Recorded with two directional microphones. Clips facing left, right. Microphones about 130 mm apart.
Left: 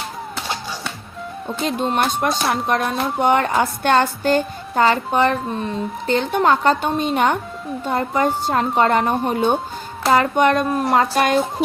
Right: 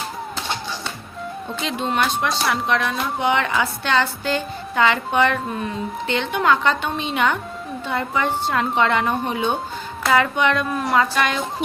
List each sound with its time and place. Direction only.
1.8 s a woman's voice: 45° left (ahead or behind)